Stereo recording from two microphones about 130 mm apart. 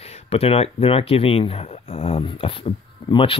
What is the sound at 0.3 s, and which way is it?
Speech, 50° left (ahead or behind).